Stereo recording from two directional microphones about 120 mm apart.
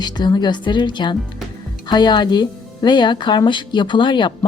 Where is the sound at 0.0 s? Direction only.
35° left (ahead or behind).